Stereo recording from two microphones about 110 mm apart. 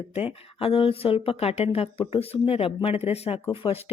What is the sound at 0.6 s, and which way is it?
Speech, 55° left (ahead or behind).